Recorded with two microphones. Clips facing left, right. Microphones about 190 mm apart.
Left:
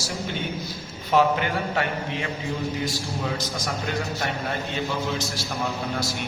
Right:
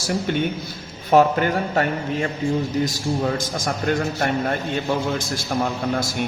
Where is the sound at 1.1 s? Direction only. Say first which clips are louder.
Right 5 dB; 45° right (ahead or behind).